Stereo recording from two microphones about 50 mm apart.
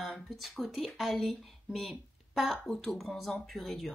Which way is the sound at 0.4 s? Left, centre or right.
Centre.